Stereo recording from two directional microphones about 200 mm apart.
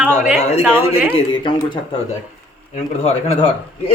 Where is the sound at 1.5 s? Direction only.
25° left (ahead or behind).